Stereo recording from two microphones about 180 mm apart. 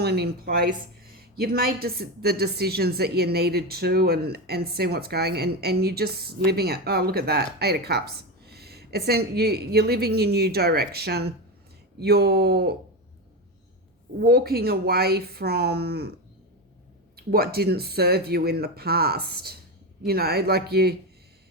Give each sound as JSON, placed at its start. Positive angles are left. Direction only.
{"t": 0.0, "sound": "a woman's voice", "side_deg": -60}
{"t": 14.2, "sound": "a woman's voice", "side_deg": -60}
{"t": 17.2, "sound": "a woman's voice", "side_deg": -55}